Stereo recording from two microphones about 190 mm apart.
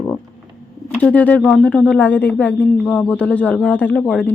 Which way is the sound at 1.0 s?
10° left (ahead or behind).